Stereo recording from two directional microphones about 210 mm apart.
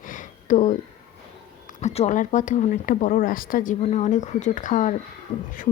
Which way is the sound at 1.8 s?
35° left (ahead or behind).